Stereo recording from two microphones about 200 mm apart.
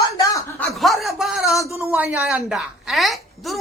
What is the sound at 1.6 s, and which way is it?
Speech, 15° left (ahead or behind).